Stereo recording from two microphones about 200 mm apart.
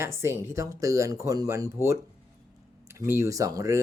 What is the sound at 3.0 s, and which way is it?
Speech, 15° right (ahead or behind).